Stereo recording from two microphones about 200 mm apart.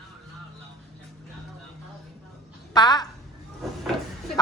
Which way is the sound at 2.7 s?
20° left (ahead or behind).